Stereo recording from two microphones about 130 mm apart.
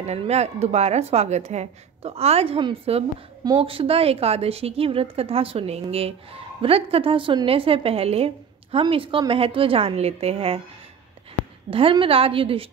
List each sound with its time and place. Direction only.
0.0 s a woman's voice: 55° right (ahead or behind)
11.7 s a woman's voice: 45° right (ahead or behind)